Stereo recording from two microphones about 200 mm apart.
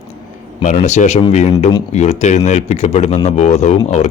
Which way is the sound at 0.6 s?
35° left (ahead or behind).